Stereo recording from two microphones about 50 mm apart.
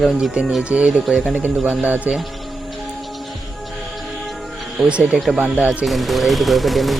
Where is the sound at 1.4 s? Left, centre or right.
Right.